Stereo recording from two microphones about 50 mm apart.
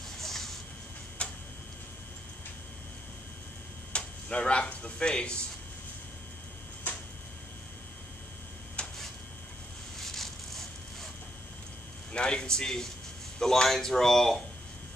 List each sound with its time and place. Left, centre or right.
0.2 s vehicle: centre
1.2 s tick-tock: left
3.9 s speech: left
8.8 s a sound: left
9.9 s a sound: centre
12.1 s a man's voice: centre